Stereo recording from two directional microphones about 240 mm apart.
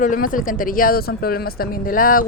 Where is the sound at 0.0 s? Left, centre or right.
Left.